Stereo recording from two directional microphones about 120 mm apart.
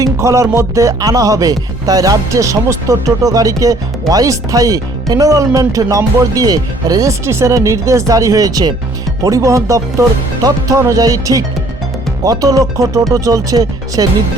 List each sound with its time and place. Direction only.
0.0 s speech: 25° right (ahead or behind)